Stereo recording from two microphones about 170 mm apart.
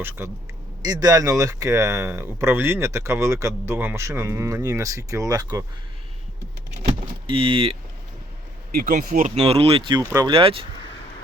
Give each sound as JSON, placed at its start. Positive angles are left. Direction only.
{"t": 0.8, "sound": "speech", "side_deg": -25}
{"t": 7.3, "sound": "speech", "side_deg": -30}
{"t": 8.7, "sound": "speech", "side_deg": -60}
{"t": 9.3, "sound": "speech", "side_deg": -35}
{"t": 10.3, "sound": "speech", "side_deg": -30}